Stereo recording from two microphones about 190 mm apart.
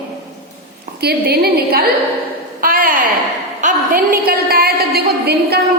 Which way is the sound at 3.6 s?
45° right (ahead or behind).